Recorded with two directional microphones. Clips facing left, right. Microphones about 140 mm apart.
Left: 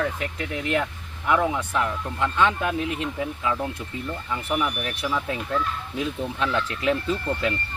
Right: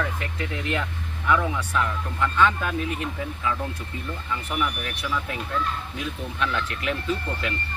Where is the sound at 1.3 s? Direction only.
25° left (ahead or behind).